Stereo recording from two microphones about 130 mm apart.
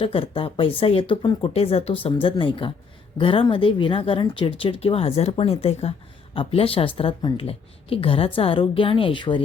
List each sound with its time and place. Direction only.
0.0 s speech: 45° left (ahead or behind)
2.2 s speech: 40° left (ahead or behind)
7.2 s speech: 30° left (ahead or behind)
7.4 s speech: 45° left (ahead or behind)